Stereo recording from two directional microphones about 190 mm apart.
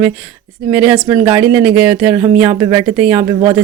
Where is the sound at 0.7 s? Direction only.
5° right (ahead or behind).